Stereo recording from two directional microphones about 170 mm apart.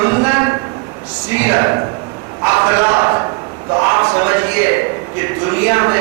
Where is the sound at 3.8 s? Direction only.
20° right (ahead or behind).